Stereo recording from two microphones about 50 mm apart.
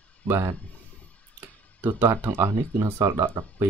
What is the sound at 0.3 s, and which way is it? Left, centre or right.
Speech, right.